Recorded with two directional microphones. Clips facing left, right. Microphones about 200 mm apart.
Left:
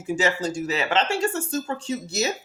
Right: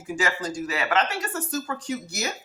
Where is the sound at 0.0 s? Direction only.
25° left (ahead or behind).